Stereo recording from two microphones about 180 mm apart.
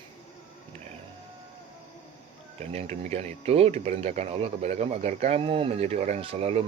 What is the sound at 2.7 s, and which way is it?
Speech, 35° right (ahead or behind).